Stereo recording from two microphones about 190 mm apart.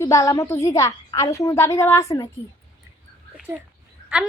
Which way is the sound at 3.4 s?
5° right (ahead or behind).